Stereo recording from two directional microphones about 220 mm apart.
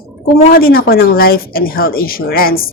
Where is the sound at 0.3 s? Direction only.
40° left (ahead or behind).